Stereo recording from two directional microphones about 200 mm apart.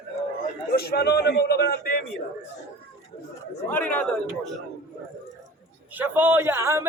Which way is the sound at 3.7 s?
10° left (ahead or behind).